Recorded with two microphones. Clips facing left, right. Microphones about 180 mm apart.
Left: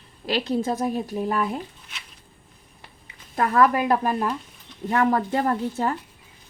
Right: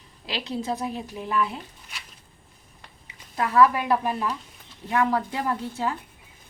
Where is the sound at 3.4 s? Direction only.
50° left (ahead or behind).